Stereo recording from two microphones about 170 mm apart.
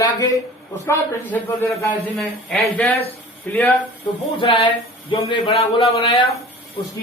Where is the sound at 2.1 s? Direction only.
Centre (ahead or behind).